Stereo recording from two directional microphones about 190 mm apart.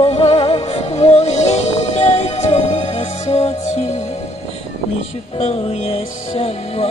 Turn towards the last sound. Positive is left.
turn(degrees=30)  # may be behind; listen again after turning